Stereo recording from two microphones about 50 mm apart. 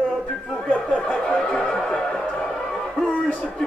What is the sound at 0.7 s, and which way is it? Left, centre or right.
Speech, left.